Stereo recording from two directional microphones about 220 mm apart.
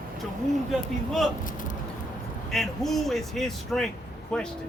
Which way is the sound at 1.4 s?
40° left (ahead or behind).